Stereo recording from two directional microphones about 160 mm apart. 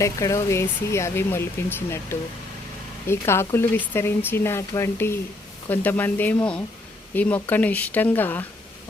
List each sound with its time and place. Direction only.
0.0 s speech: 20° left (ahead or behind)